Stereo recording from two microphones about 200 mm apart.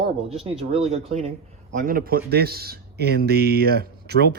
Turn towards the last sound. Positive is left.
turn(degrees=-55)  # may be behind; listen again after turning